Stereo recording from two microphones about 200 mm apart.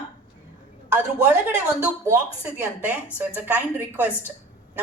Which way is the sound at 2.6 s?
5° right (ahead or behind).